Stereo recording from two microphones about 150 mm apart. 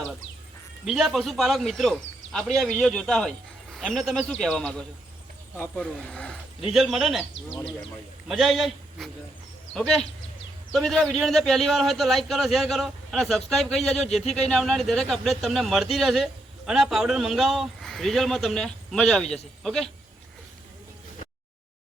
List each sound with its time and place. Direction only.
0.9 s speech: centre (ahead or behind)
5.5 s speech: 15° left (ahead or behind); by 7.3 s centre (ahead or behind)
8.3 s speech: centre (ahead or behind)